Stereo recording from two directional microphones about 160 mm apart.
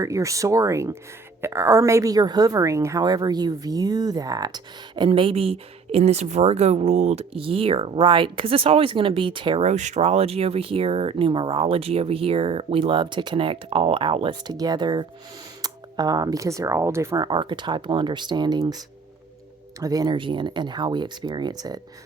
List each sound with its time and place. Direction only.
0.0 s speech: 20° right (ahead or behind)
9.6 s speech: 50° right (ahead or behind); by 18.8 s 25° right (ahead or behind)
19.8 s speech: 25° right (ahead or behind)